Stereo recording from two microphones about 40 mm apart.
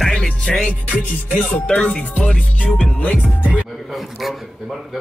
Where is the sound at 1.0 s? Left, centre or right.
Left.